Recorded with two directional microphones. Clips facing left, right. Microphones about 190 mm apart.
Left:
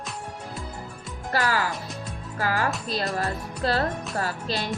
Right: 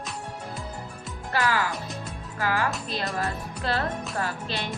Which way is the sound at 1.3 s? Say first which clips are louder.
Left 1 dB; 40° left (ahead or behind).